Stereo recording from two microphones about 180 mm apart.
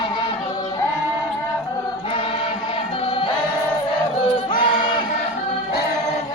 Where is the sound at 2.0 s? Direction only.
30° left (ahead or behind).